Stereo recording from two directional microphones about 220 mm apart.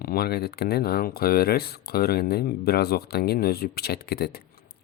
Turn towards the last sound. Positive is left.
turn(degrees=45)  # may be behind; listen again after turning